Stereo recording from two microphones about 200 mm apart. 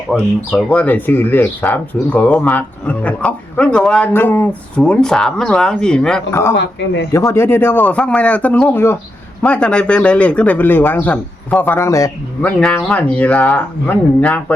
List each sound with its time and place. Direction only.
0.1 s speech: 5° left (ahead or behind)
6.6 s speech: 60° left (ahead or behind)
7.1 s speech: 15° left (ahead or behind)